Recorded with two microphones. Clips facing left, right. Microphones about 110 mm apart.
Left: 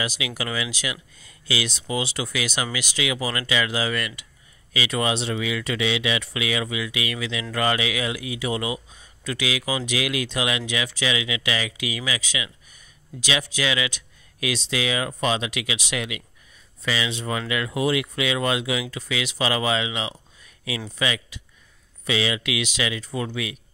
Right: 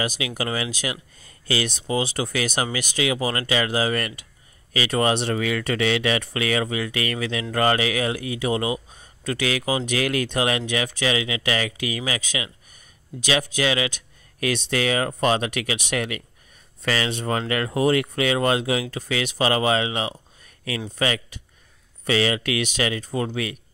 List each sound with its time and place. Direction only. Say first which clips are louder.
0.4 s speech: right 2 dB; 40° right (ahead or behind)
8.9 s speech: right 3 dB; 45° right (ahead or behind)